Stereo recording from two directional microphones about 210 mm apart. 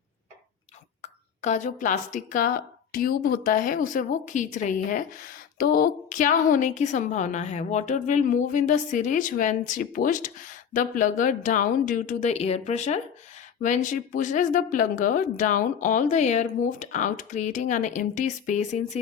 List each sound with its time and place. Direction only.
1.4 s a woman's voice: 35° left (ahead or behind)